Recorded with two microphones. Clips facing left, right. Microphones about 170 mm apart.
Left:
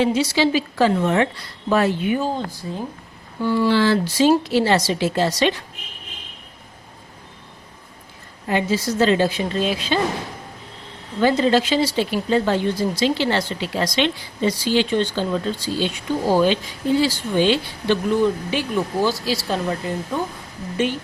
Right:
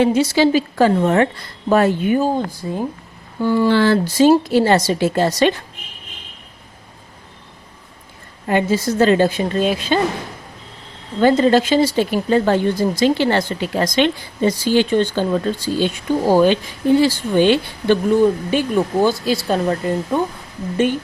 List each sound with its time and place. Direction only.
0.0 s speech: 50° right (ahead or behind)
8.4 s speech: 50° right (ahead or behind)
11.2 s speech: 50° right (ahead or behind)